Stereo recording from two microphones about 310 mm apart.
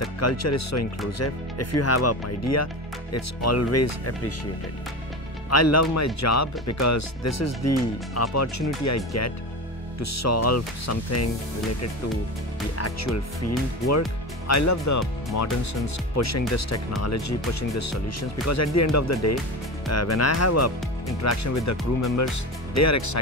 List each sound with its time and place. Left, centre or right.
0.2 s speech: left
5.5 s speech: left
12.7 s speech: left